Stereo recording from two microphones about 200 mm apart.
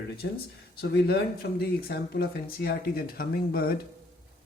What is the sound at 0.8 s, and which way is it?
Speech, 55° left (ahead or behind).